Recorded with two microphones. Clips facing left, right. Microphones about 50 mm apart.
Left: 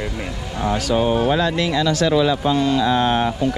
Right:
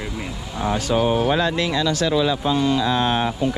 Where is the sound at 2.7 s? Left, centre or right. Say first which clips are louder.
Left 3 dB; left.